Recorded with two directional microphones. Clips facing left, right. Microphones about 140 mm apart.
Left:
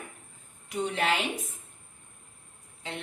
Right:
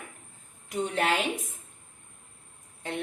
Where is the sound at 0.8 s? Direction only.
45° right (ahead or behind).